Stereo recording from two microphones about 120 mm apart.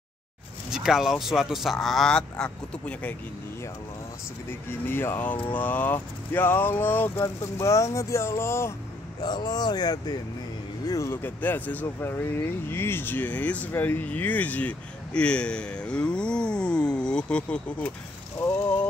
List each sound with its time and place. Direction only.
0.7 s speech: 5° right (ahead or behind)
4.6 s speech: 20° left (ahead or behind)
9.2 s speech: 35° left (ahead or behind)
11.2 s speech: 15° left (ahead or behind)